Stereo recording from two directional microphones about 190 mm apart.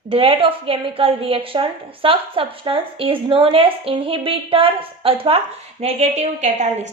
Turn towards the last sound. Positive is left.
turn(degrees=-40)  # may be behind; listen again after turning